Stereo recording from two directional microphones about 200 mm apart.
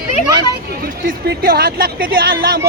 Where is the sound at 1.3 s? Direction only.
50° right (ahead or behind).